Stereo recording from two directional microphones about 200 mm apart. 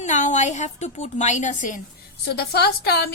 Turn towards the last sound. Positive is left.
turn(degrees=55)  # may be behind; listen again after turning